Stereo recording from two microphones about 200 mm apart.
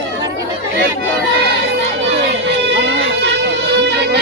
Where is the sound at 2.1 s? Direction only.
60° right (ahead or behind).